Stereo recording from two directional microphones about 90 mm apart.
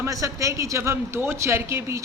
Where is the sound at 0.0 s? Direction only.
35° right (ahead or behind).